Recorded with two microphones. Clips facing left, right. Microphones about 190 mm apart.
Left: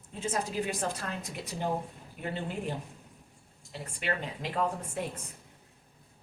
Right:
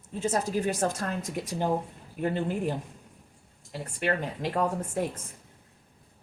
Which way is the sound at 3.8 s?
50° right (ahead or behind).